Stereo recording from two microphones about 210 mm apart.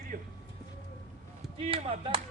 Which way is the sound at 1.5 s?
25° right (ahead or behind).